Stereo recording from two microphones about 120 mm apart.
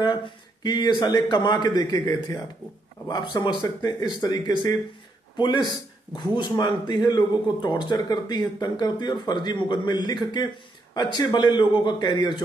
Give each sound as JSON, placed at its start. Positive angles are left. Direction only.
{"t": 0.0, "sound": "speech", "side_deg": 40}
{"t": 5.7, "sound": "speech", "side_deg": 40}